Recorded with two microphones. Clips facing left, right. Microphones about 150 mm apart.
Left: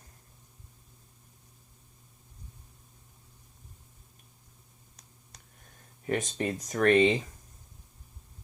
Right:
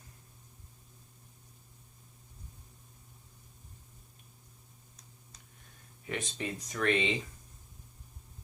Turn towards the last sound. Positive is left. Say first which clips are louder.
# left 8 dB
turn(degrees=45)  # may be behind; listen again after turning